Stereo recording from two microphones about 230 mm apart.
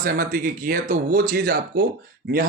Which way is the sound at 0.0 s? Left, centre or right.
Right.